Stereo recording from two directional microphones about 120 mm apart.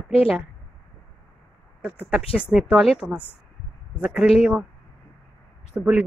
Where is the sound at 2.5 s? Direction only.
5° right (ahead or behind).